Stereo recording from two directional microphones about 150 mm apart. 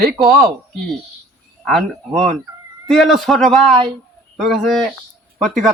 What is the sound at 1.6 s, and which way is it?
Speech, centre (ahead or behind).